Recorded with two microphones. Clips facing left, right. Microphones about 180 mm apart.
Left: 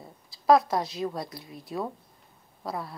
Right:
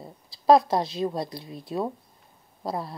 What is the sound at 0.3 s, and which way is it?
Speech, 30° right (ahead or behind).